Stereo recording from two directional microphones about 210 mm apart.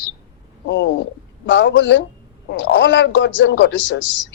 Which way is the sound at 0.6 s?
60° left (ahead or behind).